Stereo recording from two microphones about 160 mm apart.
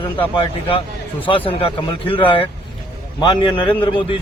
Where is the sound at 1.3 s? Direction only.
35° left (ahead or behind).